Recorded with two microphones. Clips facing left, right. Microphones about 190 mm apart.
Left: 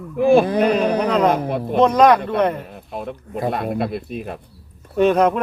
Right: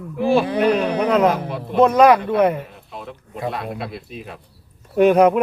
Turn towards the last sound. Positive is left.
turn(degrees=-10)  # may be behind; listen again after turning